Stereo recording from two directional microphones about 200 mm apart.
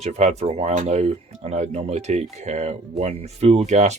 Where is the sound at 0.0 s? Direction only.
35° right (ahead or behind).